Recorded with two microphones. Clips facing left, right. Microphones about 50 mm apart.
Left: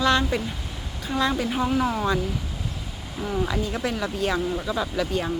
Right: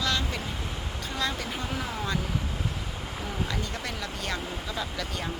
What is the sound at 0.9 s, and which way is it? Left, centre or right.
Speech, centre.